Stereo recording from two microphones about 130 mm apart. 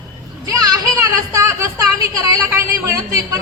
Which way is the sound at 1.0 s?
25° right (ahead or behind).